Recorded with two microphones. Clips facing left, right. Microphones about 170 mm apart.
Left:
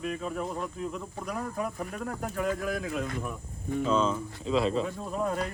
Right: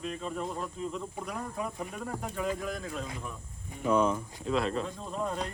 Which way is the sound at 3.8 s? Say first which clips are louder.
Right 1 dB; 15° right (ahead or behind).